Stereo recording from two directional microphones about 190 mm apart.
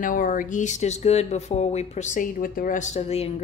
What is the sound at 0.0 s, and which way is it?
Speech, 45° left (ahead or behind).